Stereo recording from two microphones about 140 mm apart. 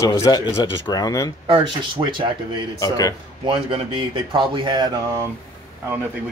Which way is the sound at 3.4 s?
40° right (ahead or behind).